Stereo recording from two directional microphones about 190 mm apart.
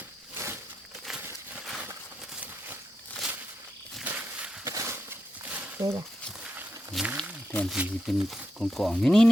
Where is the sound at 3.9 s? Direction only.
5° right (ahead or behind).